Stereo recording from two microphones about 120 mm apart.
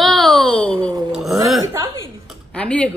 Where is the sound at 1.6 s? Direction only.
25° right (ahead or behind).